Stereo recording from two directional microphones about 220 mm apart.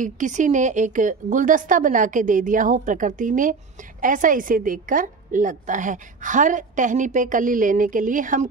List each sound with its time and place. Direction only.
0.0 s a woman's voice: 35° right (ahead or behind)